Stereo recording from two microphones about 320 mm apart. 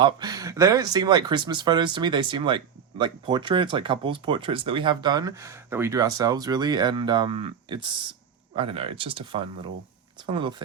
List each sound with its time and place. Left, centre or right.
0.0 s speech: centre